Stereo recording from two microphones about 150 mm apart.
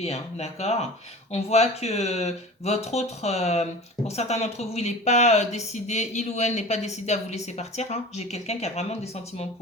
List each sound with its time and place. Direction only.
0.0 s speech: 45° left (ahead or behind)